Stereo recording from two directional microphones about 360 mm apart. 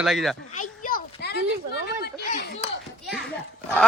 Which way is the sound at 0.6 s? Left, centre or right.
Left.